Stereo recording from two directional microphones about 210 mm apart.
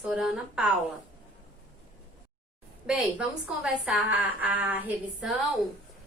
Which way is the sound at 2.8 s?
5° right (ahead or behind).